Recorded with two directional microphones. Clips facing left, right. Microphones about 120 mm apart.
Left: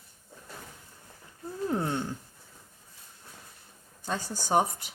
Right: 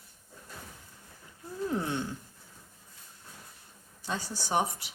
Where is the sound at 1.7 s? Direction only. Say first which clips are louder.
Left 2 dB; 45° left (ahead or behind).